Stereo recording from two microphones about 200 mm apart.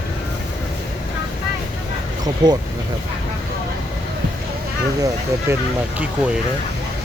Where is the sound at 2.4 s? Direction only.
20° right (ahead or behind).